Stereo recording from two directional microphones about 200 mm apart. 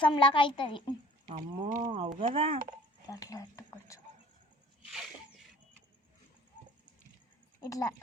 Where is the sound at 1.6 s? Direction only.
40° right (ahead or behind).